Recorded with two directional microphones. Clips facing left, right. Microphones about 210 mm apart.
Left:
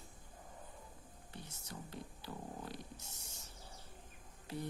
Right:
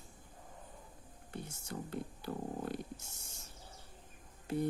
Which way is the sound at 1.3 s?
50° right (ahead or behind).